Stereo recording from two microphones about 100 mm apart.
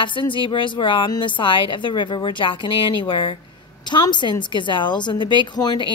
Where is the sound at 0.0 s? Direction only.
55° left (ahead or behind).